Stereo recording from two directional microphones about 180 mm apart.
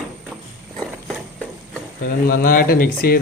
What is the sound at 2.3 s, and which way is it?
Speech, 50° left (ahead or behind).